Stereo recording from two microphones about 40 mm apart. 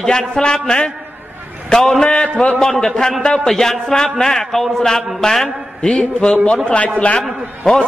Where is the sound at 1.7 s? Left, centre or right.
Centre.